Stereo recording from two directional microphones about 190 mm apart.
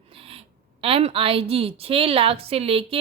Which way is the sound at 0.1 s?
30° right (ahead or behind).